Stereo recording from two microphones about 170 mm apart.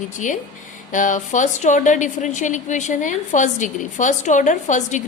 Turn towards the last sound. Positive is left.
turn(degrees=45)  # may be behind; listen again after turning